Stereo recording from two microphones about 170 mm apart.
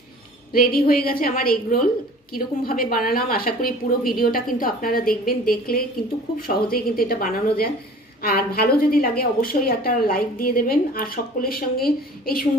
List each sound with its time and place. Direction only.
0.5 s a woman's voice: 60° left (ahead or behind)